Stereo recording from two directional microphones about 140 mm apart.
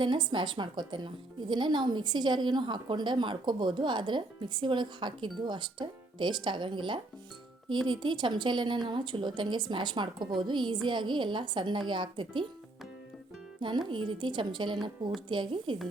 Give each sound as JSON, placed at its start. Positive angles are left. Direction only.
{"t": 0.0, "sound": "speech", "side_deg": -35}
{"t": 13.6, "sound": "speech", "side_deg": -35}